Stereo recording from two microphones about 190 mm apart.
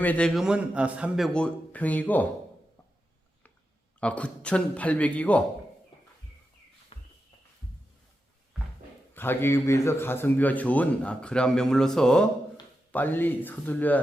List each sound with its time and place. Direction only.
0.0 s a man's voice: 5° left (ahead or behind)
4.0 s a man's voice: 5° left (ahead or behind)
6.9 s walk: 30° left (ahead or behind)
9.1 s a man's voice: 10° left (ahead or behind)